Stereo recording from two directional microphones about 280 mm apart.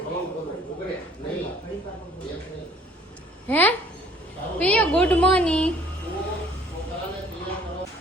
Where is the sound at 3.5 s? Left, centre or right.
Centre.